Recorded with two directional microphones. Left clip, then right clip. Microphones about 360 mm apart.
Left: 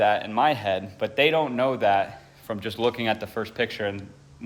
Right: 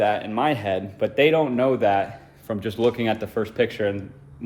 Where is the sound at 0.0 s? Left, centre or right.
Centre.